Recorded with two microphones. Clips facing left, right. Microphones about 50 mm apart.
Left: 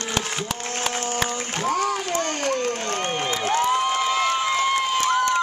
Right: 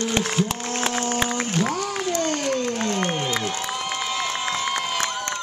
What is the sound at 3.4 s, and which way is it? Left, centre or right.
Applause, left.